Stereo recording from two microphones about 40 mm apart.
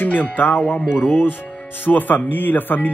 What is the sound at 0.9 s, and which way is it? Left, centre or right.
Speech, left.